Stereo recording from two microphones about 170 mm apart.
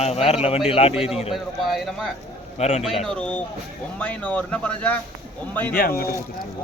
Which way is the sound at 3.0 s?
5° left (ahead or behind).